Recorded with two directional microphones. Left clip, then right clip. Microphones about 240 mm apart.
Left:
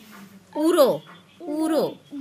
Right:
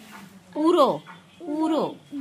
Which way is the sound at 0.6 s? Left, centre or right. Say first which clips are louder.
Left 1 dB; centre.